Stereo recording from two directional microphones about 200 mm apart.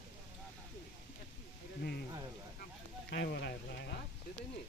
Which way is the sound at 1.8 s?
55° left (ahead or behind).